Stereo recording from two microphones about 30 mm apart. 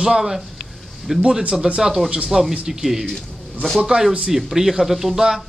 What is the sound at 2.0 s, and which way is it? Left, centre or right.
Speech, right.